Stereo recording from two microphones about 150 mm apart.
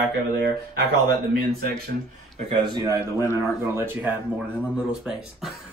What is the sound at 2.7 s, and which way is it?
A man's voice, 25° right (ahead or behind).